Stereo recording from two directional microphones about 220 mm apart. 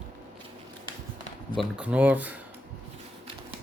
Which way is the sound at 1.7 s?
5° right (ahead or behind).